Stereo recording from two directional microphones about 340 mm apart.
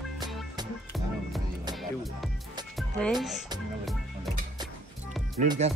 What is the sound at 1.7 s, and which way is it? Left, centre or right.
Music, centre.